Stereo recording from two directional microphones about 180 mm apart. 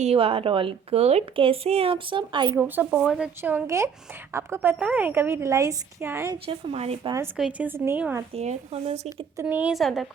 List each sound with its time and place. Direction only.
0.0 s a woman's voice: 35° right (ahead or behind)
2.6 s a woman's voice: 10° right (ahead or behind)
6.4 s a woman's voice: 30° right (ahead or behind)
7.3 s a woman's voice: 5° right (ahead or behind)
8.4 s a woman's voice: 35° right (ahead or behind)
9.0 s a woman's voice: 10° right (ahead or behind)